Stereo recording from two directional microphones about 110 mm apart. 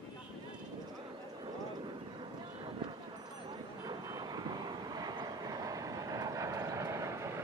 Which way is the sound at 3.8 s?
35° right (ahead or behind).